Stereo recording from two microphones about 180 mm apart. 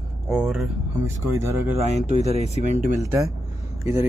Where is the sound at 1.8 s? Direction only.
40° right (ahead or behind).